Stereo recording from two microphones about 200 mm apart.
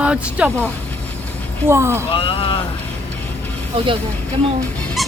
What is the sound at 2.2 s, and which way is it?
Speech, 25° left (ahead or behind).